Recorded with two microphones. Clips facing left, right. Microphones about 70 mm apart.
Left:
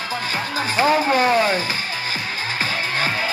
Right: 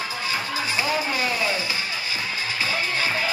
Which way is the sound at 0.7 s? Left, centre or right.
Left.